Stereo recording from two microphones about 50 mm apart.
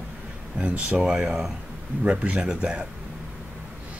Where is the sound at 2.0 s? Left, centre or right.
Right.